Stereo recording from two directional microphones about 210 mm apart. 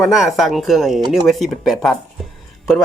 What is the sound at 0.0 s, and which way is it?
Speech, centre (ahead or behind).